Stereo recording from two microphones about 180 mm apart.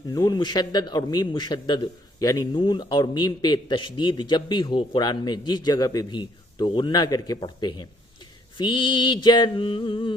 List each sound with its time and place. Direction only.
0.1 s a man's voice: 20° left (ahead or behind)